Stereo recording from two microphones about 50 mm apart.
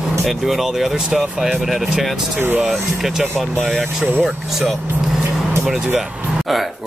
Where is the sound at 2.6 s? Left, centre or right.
Centre.